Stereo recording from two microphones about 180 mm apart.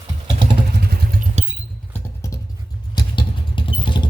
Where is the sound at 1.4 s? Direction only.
40° right (ahead or behind).